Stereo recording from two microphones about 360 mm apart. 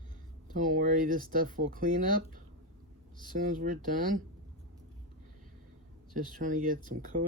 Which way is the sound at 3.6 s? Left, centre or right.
Right.